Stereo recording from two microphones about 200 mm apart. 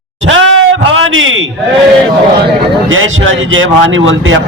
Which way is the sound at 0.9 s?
75° right (ahead or behind).